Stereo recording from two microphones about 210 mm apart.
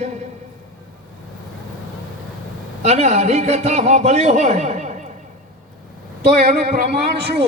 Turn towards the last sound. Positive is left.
turn(degrees=-50)  # may be behind; listen again after turning